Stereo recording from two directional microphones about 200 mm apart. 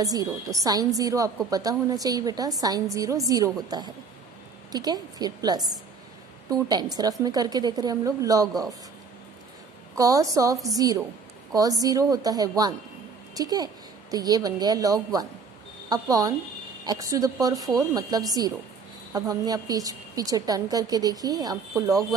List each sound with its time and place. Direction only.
0.0 s a woman's voice: 15° right (ahead or behind)
4.7 s a woman's voice: 20° right (ahead or behind)
9.9 s a woman's voice: 15° right (ahead or behind)